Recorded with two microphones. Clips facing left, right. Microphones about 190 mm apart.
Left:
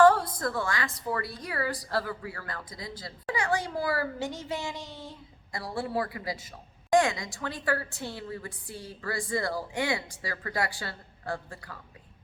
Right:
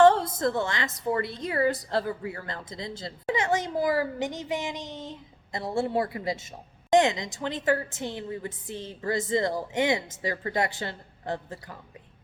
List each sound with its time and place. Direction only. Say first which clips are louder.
0.0 s a woman's voice: right 2 dB; 25° right (ahead or behind)